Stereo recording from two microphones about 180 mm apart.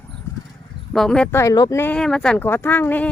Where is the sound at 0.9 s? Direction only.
5° left (ahead or behind).